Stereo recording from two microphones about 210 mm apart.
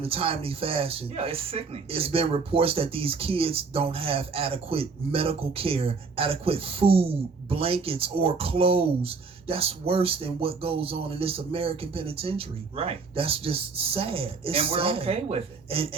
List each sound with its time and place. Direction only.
0.0 s speech: 25° right (ahead or behind)